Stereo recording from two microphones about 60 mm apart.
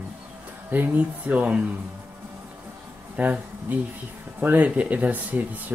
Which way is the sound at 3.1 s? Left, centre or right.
Right.